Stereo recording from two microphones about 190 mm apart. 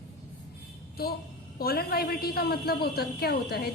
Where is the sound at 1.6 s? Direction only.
55° left (ahead or behind).